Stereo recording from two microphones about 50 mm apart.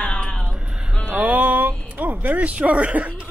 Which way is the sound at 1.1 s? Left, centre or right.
Right.